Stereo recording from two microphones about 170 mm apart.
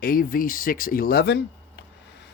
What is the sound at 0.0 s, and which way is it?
Speech, 60° left (ahead or behind).